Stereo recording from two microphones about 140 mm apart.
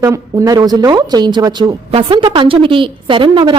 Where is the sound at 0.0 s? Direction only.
25° right (ahead or behind).